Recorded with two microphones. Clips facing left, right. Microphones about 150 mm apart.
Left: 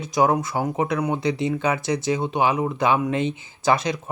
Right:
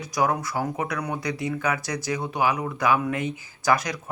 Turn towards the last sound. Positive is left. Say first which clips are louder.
# left 2 dB
turn(degrees=25)  # may be behind; listen again after turning